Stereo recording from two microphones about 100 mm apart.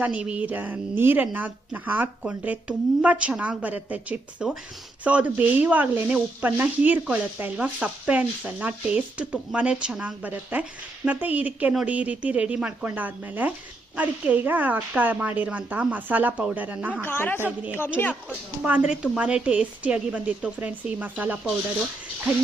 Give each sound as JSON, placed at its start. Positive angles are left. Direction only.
{"t": 0.0, "sound": "speech", "side_deg": -15}
{"t": 17.0, "sound": "speech", "side_deg": 20}
{"t": 18.1, "sound": "speech", "side_deg": -15}